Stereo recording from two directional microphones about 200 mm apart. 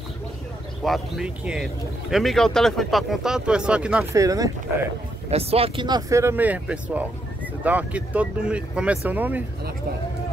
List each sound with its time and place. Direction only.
0.8 s speech: centre (ahead or behind)
4.1 s speech: 15° right (ahead or behind)
5.3 s speech: 30° right (ahead or behind); by 9.4 s 10° right (ahead or behind)